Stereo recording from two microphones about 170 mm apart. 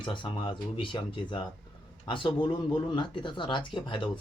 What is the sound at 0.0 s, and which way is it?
Speech, 25° left (ahead or behind).